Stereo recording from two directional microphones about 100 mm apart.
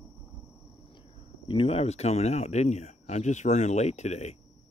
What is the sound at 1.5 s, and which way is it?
Speech, 75° left (ahead or behind).